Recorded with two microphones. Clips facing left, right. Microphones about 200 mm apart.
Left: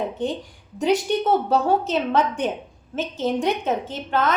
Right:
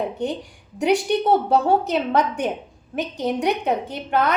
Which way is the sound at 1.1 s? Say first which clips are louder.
Right 2 dB; 15° right (ahead or behind).